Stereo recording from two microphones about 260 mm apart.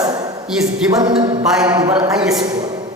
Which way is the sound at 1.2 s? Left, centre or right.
Centre.